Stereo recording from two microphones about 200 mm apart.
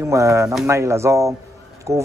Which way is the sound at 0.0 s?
15° right (ahead or behind).